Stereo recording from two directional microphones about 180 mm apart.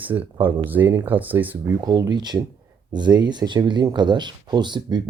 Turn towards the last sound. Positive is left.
turn(degrees=-25)  # may be behind; listen again after turning